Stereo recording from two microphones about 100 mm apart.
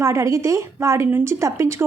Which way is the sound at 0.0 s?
30° right (ahead or behind).